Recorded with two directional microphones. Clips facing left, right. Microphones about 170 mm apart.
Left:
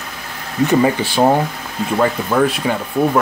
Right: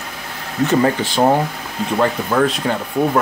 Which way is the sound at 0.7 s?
10° left (ahead or behind).